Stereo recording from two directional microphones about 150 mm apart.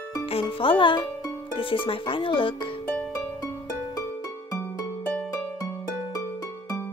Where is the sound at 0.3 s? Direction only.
35° left (ahead or behind).